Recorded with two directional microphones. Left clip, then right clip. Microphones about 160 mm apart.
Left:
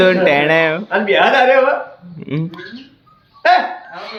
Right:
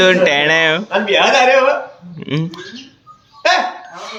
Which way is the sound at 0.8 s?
30° left (ahead or behind).